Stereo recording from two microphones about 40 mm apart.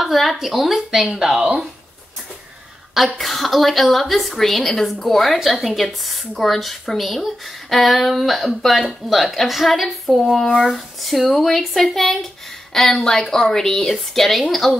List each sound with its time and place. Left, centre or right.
0.0 s a woman's voice: centre
3.2 s a woman's voice: centre